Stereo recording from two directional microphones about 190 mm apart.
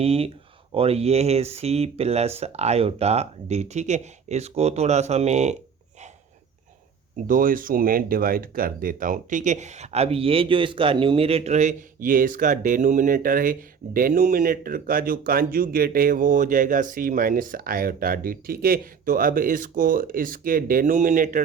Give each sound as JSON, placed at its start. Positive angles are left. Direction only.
{"t": 0.0, "sound": "speech", "side_deg": -30}
{"t": 7.3, "sound": "speech", "side_deg": -45}